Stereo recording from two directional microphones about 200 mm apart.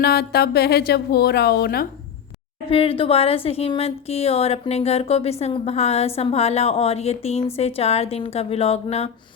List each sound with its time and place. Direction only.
0.0 s speech: 50° left (ahead or behind)
2.6 s a woman's voice: 30° left (ahead or behind)